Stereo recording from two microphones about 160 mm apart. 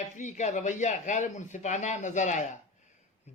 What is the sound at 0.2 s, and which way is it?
A man's voice, 50° left (ahead or behind).